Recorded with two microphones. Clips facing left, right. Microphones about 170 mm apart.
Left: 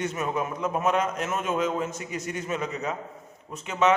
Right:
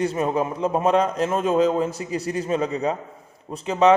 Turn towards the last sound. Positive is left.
turn(degrees=-35)  # may be behind; listen again after turning